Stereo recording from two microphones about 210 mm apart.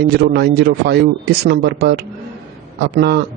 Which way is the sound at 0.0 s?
50° right (ahead or behind).